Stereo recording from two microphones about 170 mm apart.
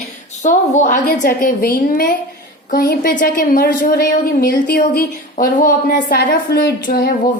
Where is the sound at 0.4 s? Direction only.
45° left (ahead or behind).